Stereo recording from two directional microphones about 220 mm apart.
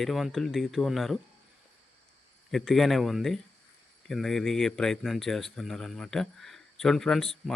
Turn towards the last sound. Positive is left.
turn(degrees=0)  # may be behind; listen again after turning